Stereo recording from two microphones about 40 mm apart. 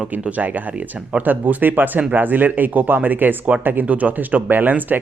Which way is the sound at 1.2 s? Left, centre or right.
Right.